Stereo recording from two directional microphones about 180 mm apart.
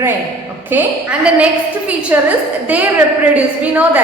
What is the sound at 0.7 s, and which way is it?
A woman's voice, 5° right (ahead or behind).